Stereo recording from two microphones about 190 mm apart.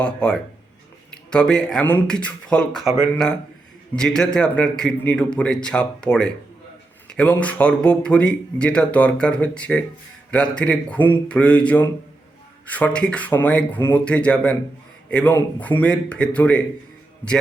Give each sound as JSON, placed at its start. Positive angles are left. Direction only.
{"t": 0.0, "sound": "speech", "side_deg": 5}
{"t": 2.8, "sound": "a man's voice", "side_deg": -15}
{"t": 3.9, "sound": "a man's voice", "side_deg": 5}